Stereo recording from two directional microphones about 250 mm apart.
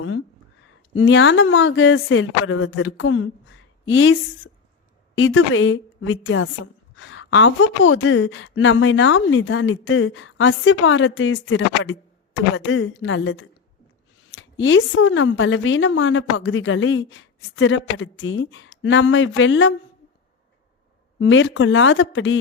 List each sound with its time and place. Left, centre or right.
0.9 s a woman's voice: left
21.2 s a woman's voice: left